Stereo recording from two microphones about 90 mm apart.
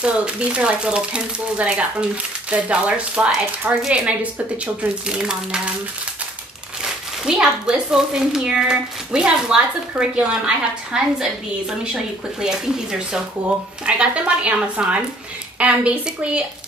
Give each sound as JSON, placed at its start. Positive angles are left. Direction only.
{"t": 0.0, "sound": "speech", "side_deg": -10}
{"t": 6.8, "sound": "speech", "side_deg": -10}
{"t": 13.8, "sound": "speech", "side_deg": -10}